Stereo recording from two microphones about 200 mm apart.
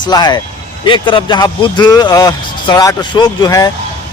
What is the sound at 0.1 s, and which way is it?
Speech, 20° left (ahead or behind).